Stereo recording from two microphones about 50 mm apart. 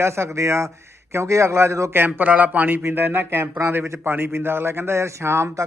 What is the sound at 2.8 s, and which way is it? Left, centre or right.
Speech, right.